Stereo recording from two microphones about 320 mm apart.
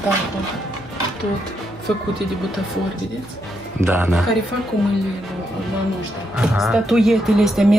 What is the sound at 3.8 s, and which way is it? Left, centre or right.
Speech, centre.